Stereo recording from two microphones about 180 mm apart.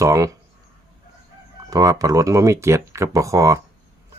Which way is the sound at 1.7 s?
20° right (ahead or behind).